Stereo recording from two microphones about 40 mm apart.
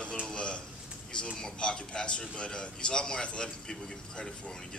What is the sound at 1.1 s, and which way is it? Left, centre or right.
Speech, left.